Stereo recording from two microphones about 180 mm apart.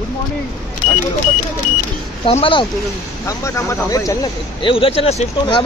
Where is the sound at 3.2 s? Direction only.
15° left (ahead or behind).